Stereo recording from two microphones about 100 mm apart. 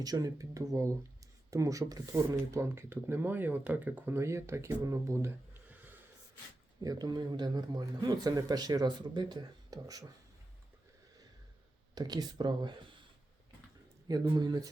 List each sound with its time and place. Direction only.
0.0 s speech: 40° right (ahead or behind); by 6.0 s 20° right (ahead or behind)
6.8 s speech: 40° right (ahead or behind)
11.9 s speech: 40° right (ahead or behind)
14.1 s speech: 45° right (ahead or behind)